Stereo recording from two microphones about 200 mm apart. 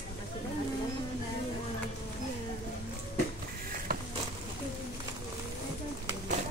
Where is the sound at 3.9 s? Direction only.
50° right (ahead or behind).